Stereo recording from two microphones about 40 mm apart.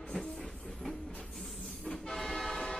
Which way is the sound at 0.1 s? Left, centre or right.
Centre.